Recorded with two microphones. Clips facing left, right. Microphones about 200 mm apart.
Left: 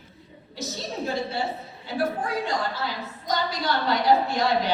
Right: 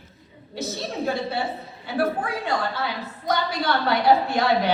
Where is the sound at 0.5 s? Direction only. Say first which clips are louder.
Right 3 dB; 60° right (ahead or behind).